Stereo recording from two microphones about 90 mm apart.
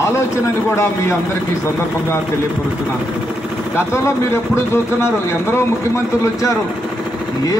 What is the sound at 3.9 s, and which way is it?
Speech, 30° left (ahead or behind).